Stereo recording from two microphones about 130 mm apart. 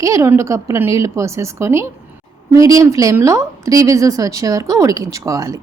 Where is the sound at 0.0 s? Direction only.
20° right (ahead or behind).